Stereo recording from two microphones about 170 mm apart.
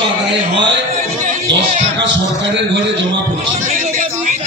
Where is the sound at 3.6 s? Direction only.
55° right (ahead or behind).